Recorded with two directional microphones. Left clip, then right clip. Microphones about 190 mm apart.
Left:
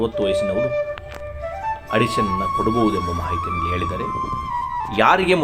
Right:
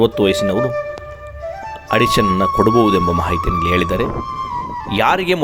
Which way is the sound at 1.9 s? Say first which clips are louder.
Right 6 dB; 55° right (ahead or behind).